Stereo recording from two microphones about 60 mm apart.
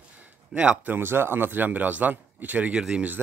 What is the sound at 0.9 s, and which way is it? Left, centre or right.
Speech, right.